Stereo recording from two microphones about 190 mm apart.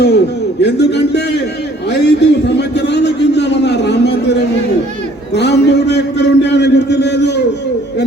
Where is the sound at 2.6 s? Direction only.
65° left (ahead or behind).